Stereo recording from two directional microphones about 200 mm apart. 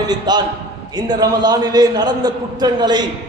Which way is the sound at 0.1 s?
20° right (ahead or behind).